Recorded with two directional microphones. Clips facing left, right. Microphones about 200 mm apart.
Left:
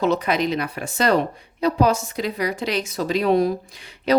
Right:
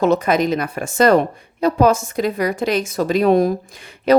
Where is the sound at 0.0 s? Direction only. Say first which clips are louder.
Right 4 dB; 50° right (ahead or behind).